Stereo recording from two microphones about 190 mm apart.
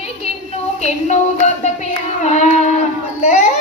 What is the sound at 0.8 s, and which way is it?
Music, 35° left (ahead or behind).